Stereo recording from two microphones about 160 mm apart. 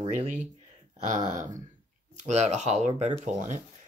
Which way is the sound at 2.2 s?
45° right (ahead or behind).